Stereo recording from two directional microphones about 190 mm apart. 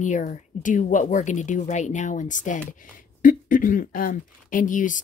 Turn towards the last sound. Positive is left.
turn(degrees=45)  # may be behind; listen again after turning